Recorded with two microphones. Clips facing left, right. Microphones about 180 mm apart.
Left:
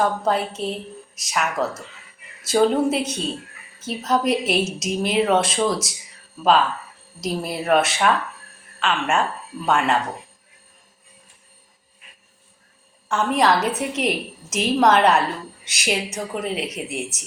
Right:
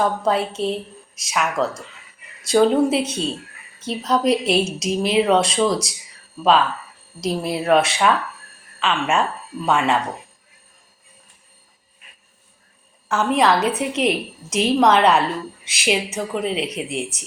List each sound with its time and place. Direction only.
0.3 s a woman's voice: centre (ahead or behind)
7.2 s a woman's voice: centre (ahead or behind)
13.1 s a woman's voice: 5° right (ahead or behind)